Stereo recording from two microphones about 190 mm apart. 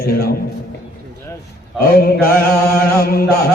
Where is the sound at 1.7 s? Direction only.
50° left (ahead or behind).